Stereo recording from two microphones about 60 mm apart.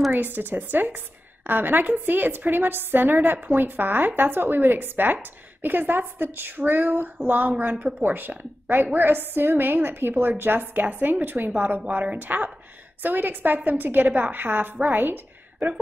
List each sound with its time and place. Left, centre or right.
0.1 s a woman's voice: right